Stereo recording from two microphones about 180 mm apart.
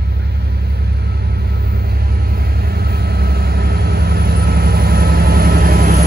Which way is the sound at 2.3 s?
60° right (ahead or behind).